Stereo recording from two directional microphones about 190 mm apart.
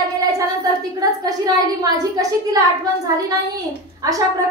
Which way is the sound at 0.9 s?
20° right (ahead or behind).